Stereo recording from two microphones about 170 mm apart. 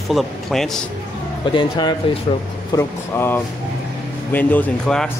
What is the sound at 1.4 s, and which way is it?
Speech, 30° left (ahead or behind).